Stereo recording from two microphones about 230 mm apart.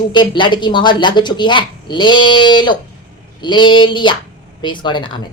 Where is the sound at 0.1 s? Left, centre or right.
Centre.